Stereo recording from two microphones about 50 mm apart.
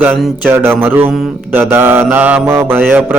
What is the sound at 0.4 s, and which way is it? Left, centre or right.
Mantra, right.